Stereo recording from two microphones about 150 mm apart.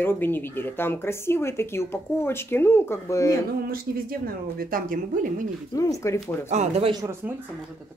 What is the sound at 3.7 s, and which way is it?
Speech, 75° right (ahead or behind).